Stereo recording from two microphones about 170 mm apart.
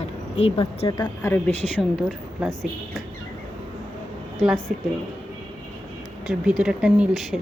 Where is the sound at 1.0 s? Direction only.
10° left (ahead or behind).